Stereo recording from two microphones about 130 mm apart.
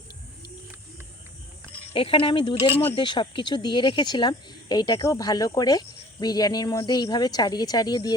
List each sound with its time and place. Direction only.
1.9 s speech: 45° left (ahead or behind)